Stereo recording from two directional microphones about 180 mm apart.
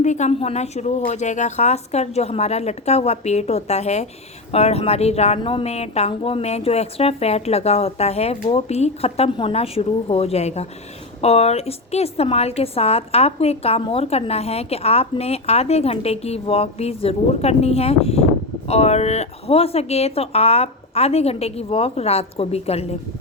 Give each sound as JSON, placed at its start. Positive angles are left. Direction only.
{"t": 0.0, "sound": "a woman's voice", "side_deg": 40}